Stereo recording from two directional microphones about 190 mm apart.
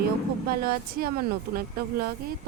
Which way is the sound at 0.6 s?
50° right (ahead or behind).